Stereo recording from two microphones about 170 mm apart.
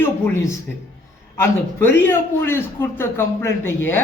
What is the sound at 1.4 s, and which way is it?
A man's voice, 15° left (ahead or behind).